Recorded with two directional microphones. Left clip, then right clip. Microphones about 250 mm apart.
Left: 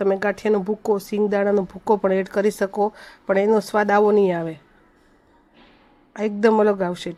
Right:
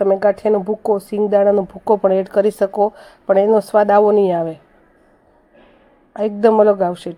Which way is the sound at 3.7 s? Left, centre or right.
Centre.